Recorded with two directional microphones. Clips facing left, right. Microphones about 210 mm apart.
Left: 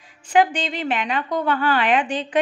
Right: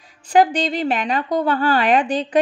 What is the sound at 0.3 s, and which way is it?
A woman's voice, 40° right (ahead or behind).